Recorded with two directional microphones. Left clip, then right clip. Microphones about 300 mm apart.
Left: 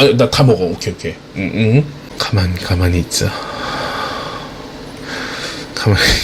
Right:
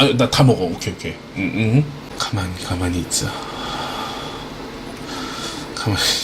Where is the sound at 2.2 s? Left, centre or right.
Left.